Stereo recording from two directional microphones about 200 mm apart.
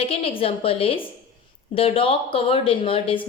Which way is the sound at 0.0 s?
30° left (ahead or behind).